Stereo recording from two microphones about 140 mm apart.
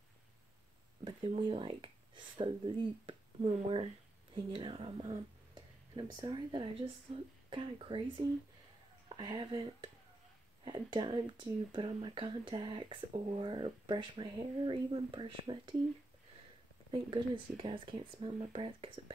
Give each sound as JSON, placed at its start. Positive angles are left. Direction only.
{"t": 1.0, "sound": "speech", "side_deg": -40}
{"t": 3.4, "sound": "speech", "side_deg": -50}
{"t": 4.5, "sound": "speech", "side_deg": -40}
{"t": 16.9, "sound": "speech", "side_deg": -40}